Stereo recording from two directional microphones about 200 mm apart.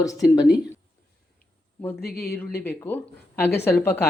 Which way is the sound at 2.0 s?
50° left (ahead or behind).